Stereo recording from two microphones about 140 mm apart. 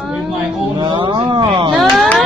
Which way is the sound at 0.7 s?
35° right (ahead or behind).